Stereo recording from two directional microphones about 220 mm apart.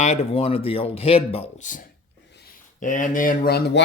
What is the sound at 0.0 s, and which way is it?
Speech, 30° left (ahead or behind).